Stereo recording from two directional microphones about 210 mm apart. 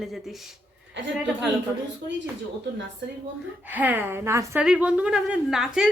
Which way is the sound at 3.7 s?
10° right (ahead or behind).